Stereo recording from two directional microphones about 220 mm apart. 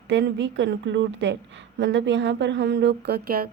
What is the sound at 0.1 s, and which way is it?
Speech, 55° right (ahead or behind).